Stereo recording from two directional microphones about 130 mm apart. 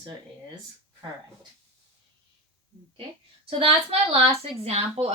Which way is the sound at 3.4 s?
45° right (ahead or behind).